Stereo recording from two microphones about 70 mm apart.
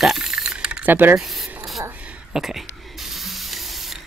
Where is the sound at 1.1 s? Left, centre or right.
Centre.